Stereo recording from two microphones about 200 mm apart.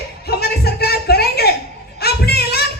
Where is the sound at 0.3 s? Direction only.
50° left (ahead or behind).